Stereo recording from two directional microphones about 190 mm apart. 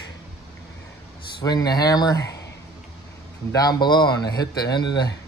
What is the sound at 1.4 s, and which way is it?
Speech, 20° left (ahead or behind).